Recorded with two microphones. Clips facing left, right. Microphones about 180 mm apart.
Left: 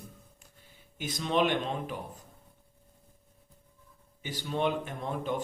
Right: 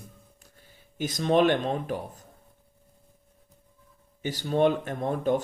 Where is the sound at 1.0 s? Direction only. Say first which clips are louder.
Right 6 dB; 40° right (ahead or behind).